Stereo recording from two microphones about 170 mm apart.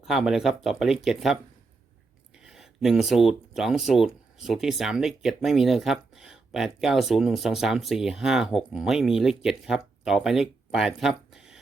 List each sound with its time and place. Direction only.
0.0 s speech: centre (ahead or behind)
2.4 s speech: centre (ahead or behind)